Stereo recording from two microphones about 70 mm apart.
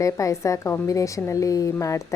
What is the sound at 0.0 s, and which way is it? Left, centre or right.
A woman's voice, left.